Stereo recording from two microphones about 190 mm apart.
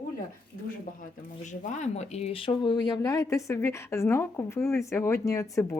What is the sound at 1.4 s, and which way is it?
Speech, 40° left (ahead or behind).